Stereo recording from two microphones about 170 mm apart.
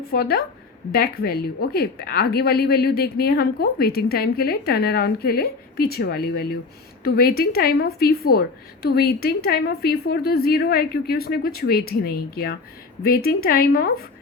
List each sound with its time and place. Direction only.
0.1 s a woman's voice: 65° left (ahead or behind)